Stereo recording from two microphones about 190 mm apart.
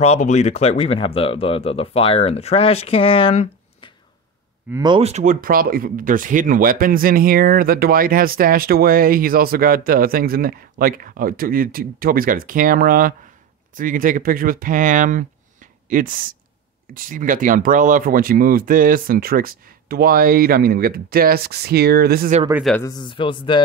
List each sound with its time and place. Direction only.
0.0 s speech: 35° left (ahead or behind)
4.7 s speech: 20° right (ahead or behind)
5.0 s speech: 40° right (ahead or behind)
22.5 s speech: centre (ahead or behind)
22.8 s speech: 20° left (ahead or behind)